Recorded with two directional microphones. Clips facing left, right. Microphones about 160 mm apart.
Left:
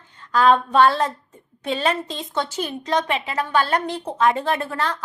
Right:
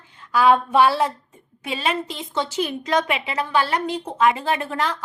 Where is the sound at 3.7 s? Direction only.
10° right (ahead or behind).